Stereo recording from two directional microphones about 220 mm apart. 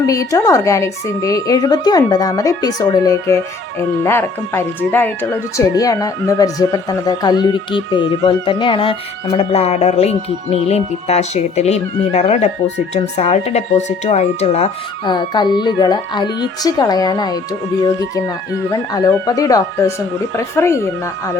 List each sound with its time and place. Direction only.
0.0 s speech: 15° left (ahead or behind)
18.7 s speech: 15° left (ahead or behind)